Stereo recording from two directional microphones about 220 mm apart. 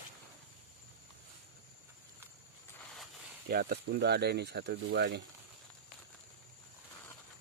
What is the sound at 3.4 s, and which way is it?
Speech, 45° right (ahead or behind).